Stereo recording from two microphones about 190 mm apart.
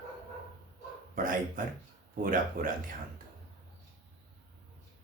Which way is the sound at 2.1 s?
45° right (ahead or behind).